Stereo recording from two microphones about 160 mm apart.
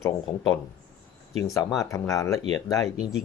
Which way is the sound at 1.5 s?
20° left (ahead or behind).